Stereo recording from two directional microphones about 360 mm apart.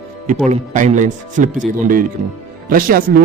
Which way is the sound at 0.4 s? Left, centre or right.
Centre.